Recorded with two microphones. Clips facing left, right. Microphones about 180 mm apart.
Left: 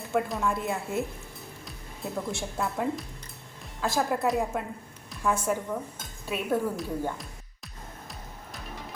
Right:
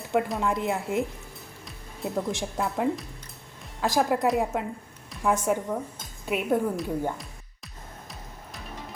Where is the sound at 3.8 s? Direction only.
15° right (ahead or behind).